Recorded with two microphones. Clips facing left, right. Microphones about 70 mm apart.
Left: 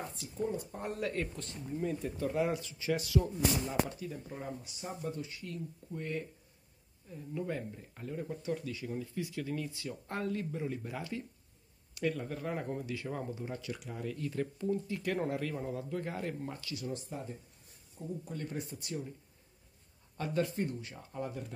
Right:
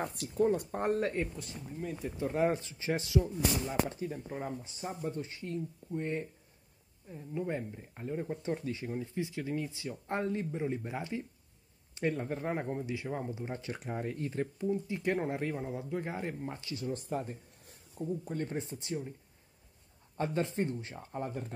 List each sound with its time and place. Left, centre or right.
0.0 s speech: right
1.3 s speech: centre
2.3 s speech: right; by 13.5 s centre
13.5 s speech: right
16.9 s speech: right
18.2 s speech: right
20.2 s speech: right